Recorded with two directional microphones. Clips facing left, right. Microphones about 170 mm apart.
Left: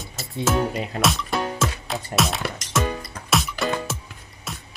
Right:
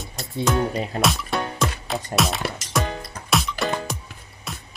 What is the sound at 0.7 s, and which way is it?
Music, 35° right (ahead or behind).